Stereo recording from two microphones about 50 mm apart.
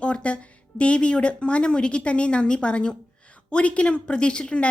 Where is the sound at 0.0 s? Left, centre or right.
Left.